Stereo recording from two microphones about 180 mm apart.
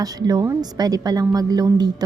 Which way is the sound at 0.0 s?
20° right (ahead or behind).